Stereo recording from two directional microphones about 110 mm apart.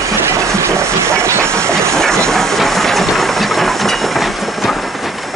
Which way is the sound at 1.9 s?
5° left (ahead or behind).